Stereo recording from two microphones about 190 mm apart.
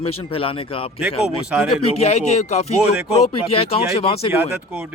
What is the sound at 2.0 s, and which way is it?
Speech, 35° left (ahead or behind).